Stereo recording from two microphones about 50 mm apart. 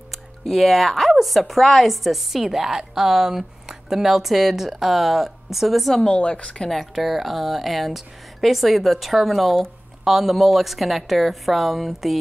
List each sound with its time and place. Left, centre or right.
0.1 s a sound: centre
1.1 s a woman's voice: centre
5.9 s speech: centre
6.7 s a woman's voice: centre